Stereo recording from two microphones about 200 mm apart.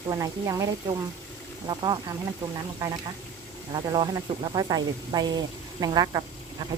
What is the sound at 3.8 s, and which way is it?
Speech, 20° right (ahead or behind).